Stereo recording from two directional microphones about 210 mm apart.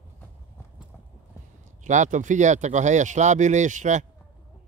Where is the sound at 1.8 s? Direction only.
35° right (ahead or behind).